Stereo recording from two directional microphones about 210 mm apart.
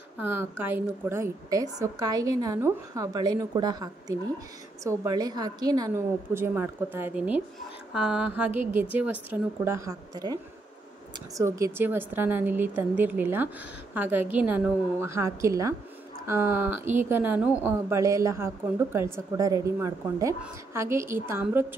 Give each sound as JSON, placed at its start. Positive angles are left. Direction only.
{"t": 0.2, "sound": "a woman's voice", "side_deg": -10}